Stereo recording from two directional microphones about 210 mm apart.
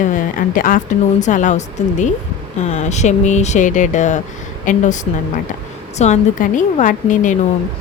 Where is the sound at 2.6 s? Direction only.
30° left (ahead or behind).